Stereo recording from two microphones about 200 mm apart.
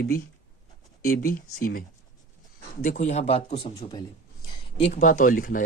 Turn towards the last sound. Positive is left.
turn(degrees=45)  # may be behind; listen again after turning